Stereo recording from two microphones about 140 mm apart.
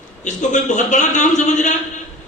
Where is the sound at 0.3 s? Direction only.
60° left (ahead or behind).